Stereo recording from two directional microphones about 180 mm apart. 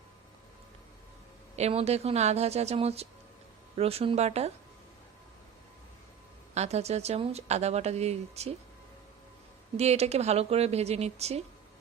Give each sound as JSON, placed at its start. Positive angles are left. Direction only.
{"t": 1.5, "sound": "speech", "side_deg": -35}
{"t": 6.5, "sound": "speech", "side_deg": -35}
{"t": 9.7, "sound": "speech", "side_deg": -35}